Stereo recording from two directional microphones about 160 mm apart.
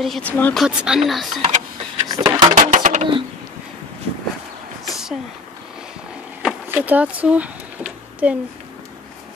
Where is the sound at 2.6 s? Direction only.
50° right (ahead or behind).